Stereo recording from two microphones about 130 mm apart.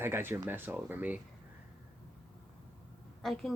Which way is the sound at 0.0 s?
15° right (ahead or behind).